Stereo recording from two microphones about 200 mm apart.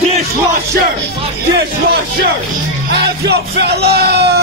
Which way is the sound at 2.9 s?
55° right (ahead or behind).